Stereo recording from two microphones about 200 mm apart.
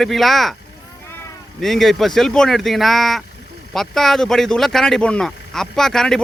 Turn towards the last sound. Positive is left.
turn(degrees=5)  # may be behind; listen again after turning